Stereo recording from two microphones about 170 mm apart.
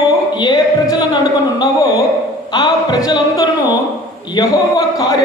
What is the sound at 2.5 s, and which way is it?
A woman's voice, 25° left (ahead or behind).